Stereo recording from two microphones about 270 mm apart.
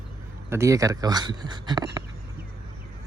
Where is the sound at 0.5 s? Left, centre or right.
Centre.